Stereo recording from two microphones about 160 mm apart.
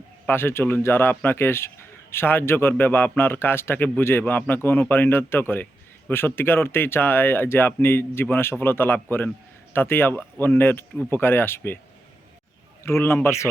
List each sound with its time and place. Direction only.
0.3 s a man's voice: 15° left (ahead or behind)
12.8 s a man's voice: 15° left (ahead or behind)